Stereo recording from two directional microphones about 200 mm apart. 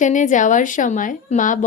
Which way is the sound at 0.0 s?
40° left (ahead or behind).